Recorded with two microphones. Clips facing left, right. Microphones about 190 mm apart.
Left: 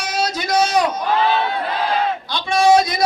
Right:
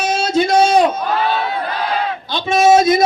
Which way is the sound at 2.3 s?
20° right (ahead or behind).